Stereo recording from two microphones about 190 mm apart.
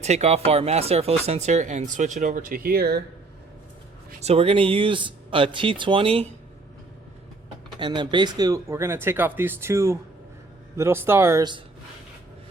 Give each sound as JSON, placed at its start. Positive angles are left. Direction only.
{"t": 0.0, "sound": "speech", "side_deg": -35}
{"t": 4.2, "sound": "speech", "side_deg": -35}
{"t": 7.8, "sound": "speech", "side_deg": -25}